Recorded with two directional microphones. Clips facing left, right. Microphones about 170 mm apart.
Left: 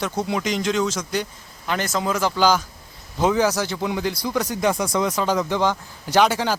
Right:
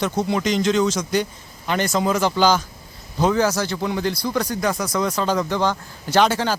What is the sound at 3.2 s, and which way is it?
Speech, 15° left (ahead or behind).